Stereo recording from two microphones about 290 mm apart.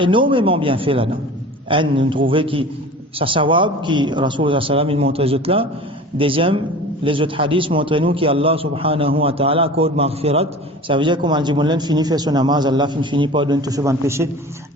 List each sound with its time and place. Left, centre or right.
0.0 s a man's voice: centre